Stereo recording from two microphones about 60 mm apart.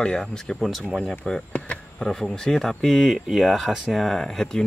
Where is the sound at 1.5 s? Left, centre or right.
Left.